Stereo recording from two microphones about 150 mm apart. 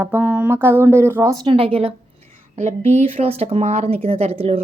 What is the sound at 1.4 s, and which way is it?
Speech, 35° right (ahead or behind).